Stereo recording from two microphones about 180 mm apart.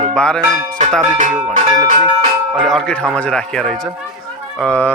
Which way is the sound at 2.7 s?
5° left (ahead or behind).